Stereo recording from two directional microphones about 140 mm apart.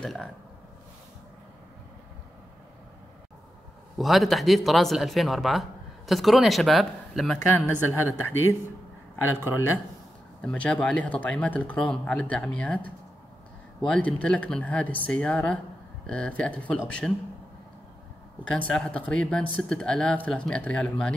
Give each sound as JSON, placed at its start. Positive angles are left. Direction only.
{"t": 0.0, "sound": "speech", "side_deg": 5}
{"t": 4.0, "sound": "speech", "side_deg": 0}
{"t": 7.5, "sound": "speech", "side_deg": 15}
{"t": 10.4, "sound": "speech", "side_deg": 5}
{"t": 18.7, "sound": "speech", "side_deg": 5}